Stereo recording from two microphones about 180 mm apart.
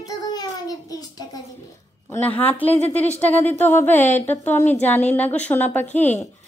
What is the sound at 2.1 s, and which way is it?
Speech, 10° left (ahead or behind).